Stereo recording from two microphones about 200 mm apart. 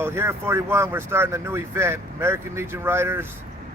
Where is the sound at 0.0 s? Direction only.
15° right (ahead or behind).